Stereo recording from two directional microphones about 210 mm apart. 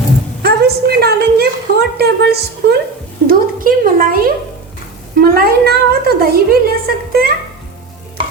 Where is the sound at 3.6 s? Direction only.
40° right (ahead or behind).